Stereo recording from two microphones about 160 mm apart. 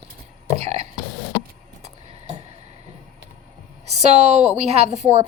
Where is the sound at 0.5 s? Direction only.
40° right (ahead or behind).